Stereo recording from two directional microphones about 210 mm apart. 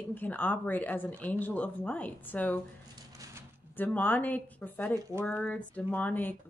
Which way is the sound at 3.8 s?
10° left (ahead or behind).